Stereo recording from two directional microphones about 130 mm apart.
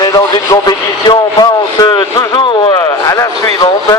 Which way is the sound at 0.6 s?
35° left (ahead or behind).